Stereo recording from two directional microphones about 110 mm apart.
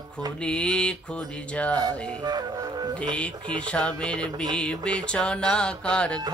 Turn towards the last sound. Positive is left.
turn(degrees=10)  # may be behind; listen again after turning